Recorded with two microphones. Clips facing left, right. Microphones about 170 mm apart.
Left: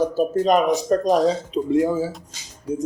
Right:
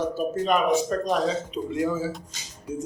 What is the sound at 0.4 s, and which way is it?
Speech, 40° left (ahead or behind).